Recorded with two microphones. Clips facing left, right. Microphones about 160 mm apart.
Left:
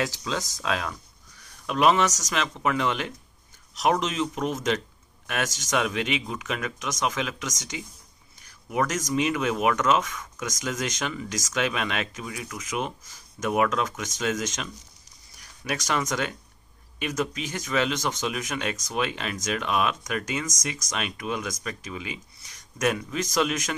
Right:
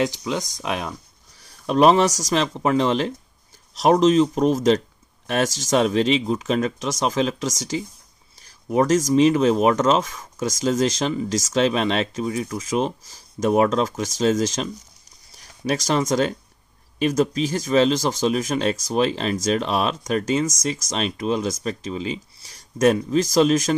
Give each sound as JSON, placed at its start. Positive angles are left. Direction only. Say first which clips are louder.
{"t": 0.0, "sound": "speech", "louder": "right 5 dB", "side_deg": -20}
{"t": 1.4, "sound": "speech", "louder": "right 6 dB", "side_deg": -35}